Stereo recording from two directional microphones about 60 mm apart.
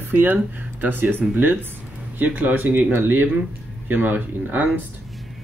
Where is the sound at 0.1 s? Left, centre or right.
Right.